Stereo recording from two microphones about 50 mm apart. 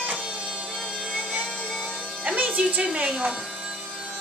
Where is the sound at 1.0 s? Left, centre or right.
Centre.